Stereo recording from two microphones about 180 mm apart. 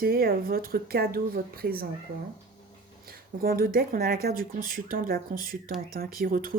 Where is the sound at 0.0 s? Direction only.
55° right (ahead or behind).